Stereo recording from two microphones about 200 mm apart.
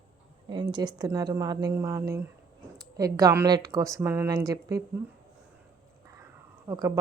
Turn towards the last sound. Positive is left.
turn(degrees=-20)  # may be behind; listen again after turning